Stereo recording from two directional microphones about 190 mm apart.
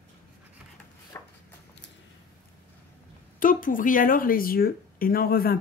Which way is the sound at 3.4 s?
45° left (ahead or behind).